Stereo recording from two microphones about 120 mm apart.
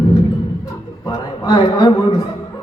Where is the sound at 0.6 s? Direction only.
25° left (ahead or behind).